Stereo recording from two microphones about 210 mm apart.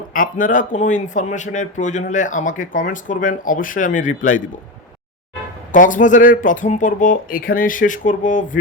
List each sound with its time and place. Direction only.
0.1 s speech: 40° left (ahead or behind)
5.7 s speech: 40° left (ahead or behind)